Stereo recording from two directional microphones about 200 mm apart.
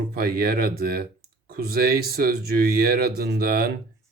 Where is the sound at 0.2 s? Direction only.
50° right (ahead or behind).